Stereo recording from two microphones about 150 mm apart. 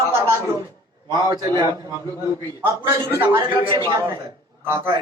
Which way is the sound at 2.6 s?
15° right (ahead or behind).